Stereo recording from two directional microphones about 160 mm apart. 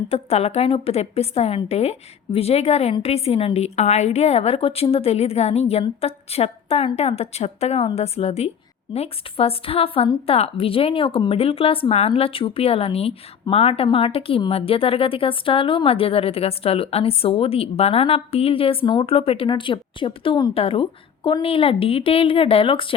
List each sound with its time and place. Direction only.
0.1 s a woman's voice: 40° left (ahead or behind)